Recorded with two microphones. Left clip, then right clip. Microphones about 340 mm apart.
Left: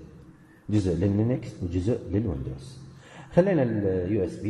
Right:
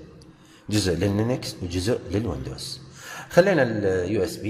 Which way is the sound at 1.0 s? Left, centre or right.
Right.